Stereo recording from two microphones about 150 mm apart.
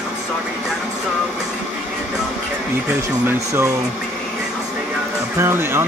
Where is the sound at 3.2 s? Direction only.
15° right (ahead or behind).